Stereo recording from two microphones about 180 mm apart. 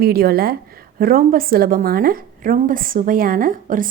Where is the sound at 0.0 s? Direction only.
60° right (ahead or behind).